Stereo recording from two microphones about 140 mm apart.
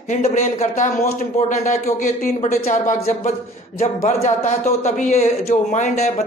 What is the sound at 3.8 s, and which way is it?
A man's voice, 50° left (ahead or behind).